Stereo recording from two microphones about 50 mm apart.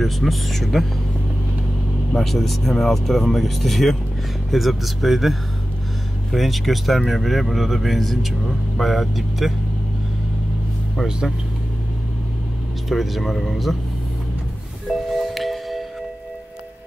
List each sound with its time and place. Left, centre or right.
0.0 s speech: centre
2.1 s speech: centre
12.8 s speech: centre
15.0 s music: centre